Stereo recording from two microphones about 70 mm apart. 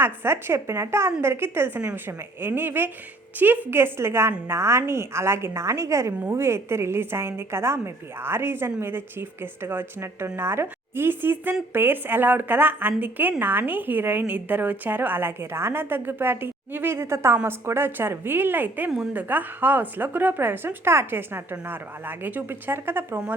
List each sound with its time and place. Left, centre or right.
0.0 s a woman's voice: right